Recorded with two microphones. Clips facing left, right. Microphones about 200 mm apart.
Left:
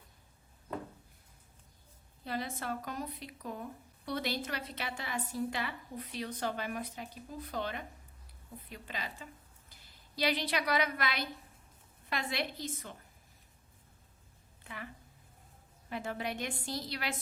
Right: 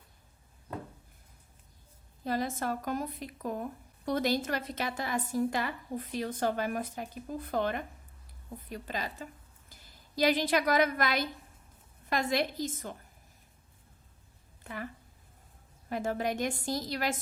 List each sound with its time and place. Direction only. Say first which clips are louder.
2.2 s a woman's voice: right 6 dB; 45° right (ahead or behind)
14.6 s a sound: right 6 dB; 45° right (ahead or behind)
15.9 s speech: right 6 dB; 45° right (ahead or behind)